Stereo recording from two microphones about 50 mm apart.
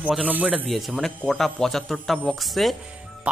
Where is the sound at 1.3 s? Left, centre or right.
Centre.